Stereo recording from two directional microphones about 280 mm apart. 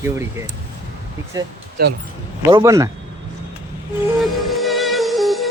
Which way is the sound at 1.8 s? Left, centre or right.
Right.